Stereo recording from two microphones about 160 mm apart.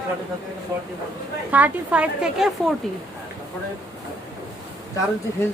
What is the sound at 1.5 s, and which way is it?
A woman's voice, 10° right (ahead or behind).